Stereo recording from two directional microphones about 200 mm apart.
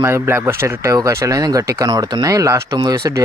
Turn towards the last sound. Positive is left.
turn(degrees=-15)  # may be behind; listen again after turning